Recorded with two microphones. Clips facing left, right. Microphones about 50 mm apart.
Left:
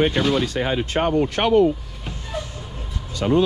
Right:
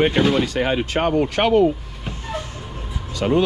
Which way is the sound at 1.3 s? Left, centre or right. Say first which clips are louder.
Even; right.